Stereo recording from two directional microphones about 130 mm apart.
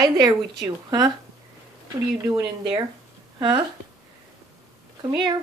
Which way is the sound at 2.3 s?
40° right (ahead or behind).